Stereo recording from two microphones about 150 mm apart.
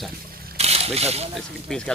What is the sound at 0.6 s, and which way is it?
Slosh, 45° right (ahead or behind).